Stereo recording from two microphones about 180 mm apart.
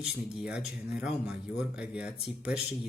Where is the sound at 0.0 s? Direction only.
5° right (ahead or behind).